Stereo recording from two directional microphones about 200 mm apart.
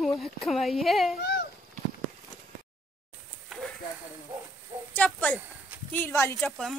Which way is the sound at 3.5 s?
Centre (ahead or behind).